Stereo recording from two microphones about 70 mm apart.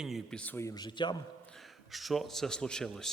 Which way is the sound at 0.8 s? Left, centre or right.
Left.